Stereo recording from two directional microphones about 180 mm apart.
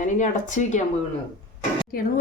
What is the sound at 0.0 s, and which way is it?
Speech, 45° left (ahead or behind).